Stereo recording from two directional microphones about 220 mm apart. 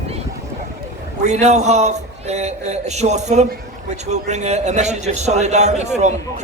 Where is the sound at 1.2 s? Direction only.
30° right (ahead or behind).